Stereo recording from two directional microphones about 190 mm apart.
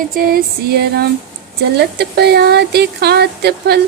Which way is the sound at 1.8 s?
60° right (ahead or behind).